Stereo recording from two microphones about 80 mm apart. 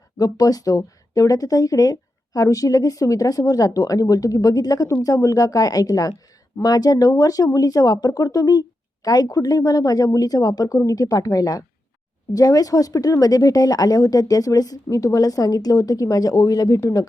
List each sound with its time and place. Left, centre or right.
0.2 s speech: left